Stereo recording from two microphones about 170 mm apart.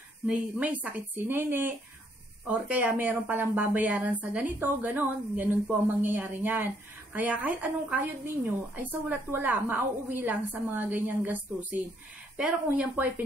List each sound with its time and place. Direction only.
0.3 s a woman's voice: 10° right (ahead or behind)
9.3 s a woman's voice: 10° right (ahead or behind)